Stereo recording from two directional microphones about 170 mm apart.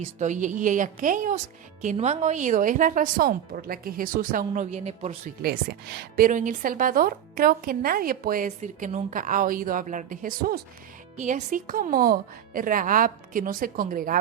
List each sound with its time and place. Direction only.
0.2 s a woman's voice: 45° right (ahead or behind)
5.4 s a woman's voice: 65° right (ahead or behind)
11.2 s a woman's voice: 45° right (ahead or behind)